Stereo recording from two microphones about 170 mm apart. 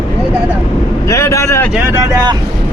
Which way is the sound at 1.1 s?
15° left (ahead or behind).